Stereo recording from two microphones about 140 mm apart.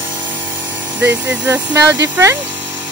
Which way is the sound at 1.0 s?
20° right (ahead or behind).